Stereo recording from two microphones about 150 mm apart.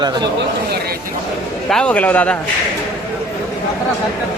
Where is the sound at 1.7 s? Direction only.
5° left (ahead or behind).